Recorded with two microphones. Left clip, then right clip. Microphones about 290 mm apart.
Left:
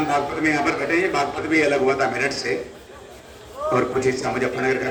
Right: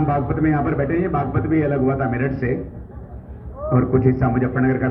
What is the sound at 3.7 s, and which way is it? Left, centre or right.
A man's voice, left.